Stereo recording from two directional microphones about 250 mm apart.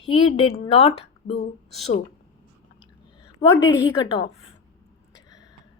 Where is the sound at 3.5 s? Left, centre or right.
Centre.